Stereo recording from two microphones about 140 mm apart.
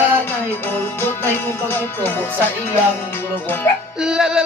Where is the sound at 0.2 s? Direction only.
15° left (ahead or behind).